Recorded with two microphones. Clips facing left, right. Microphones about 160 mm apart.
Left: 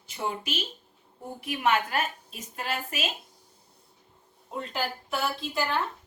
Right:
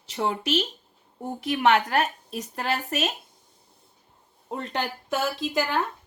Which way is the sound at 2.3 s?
40° right (ahead or behind).